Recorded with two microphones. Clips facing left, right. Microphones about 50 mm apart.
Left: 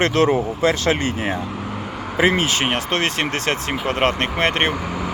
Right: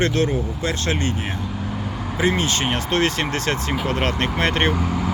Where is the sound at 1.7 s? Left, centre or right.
Left.